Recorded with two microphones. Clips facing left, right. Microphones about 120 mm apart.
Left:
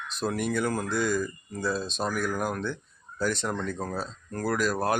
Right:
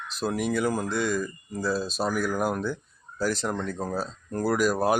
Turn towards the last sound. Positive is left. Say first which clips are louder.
# right 3 dB
turn(degrees=-10)  # may be behind; listen again after turning